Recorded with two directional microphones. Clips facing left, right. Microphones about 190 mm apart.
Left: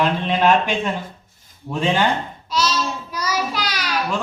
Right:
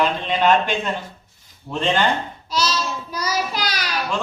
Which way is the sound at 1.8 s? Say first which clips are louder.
Left 1 dB; 10° left (ahead or behind).